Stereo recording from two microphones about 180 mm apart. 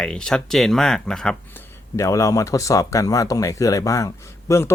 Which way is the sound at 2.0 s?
15° left (ahead or behind).